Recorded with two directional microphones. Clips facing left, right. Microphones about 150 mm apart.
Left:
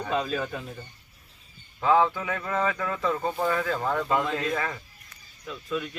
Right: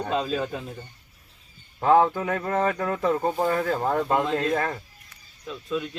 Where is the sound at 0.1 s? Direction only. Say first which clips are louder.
Right 1 dB; 30° right (ahead or behind).